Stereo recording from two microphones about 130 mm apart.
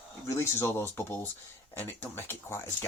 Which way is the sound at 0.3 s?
20° left (ahead or behind).